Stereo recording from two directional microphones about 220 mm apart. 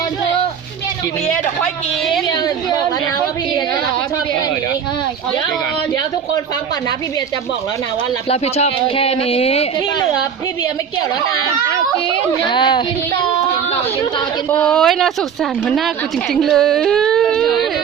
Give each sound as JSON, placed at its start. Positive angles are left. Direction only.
{"t": 8.3, "sound": "speech", "side_deg": 25}
{"t": 12.5, "sound": "speech", "side_deg": 20}
{"t": 14.5, "sound": "speech", "side_deg": 5}
{"t": 16.3, "sound": "whimper", "side_deg": 0}